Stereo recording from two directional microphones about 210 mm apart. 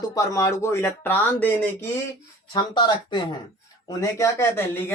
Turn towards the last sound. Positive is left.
turn(degrees=10)  # may be behind; listen again after turning